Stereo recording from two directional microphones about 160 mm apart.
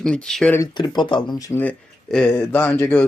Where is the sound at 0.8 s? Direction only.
30° left (ahead or behind).